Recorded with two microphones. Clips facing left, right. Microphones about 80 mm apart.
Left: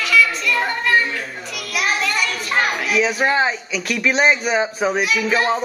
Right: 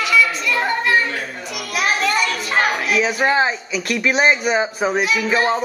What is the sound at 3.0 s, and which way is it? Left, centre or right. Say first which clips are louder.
Speech: right 1 dB; centre.